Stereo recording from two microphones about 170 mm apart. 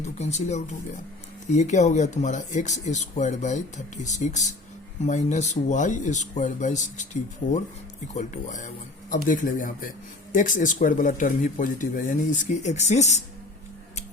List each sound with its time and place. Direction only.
0.0 s speech: 40° left (ahead or behind)
7.4 s speech: 90° left
8.0 s speech: 45° left (ahead or behind)